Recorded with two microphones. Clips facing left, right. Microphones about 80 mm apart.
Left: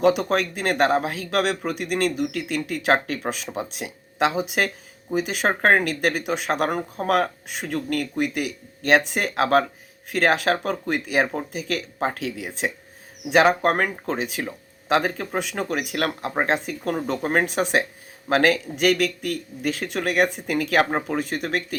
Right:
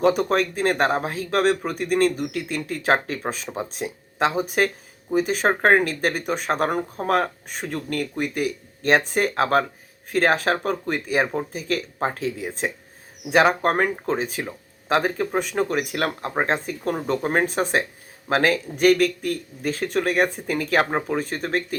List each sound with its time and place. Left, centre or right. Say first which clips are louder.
0.0 s speech: even; right